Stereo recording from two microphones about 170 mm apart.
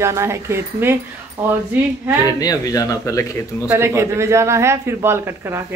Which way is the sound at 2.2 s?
20° left (ahead or behind).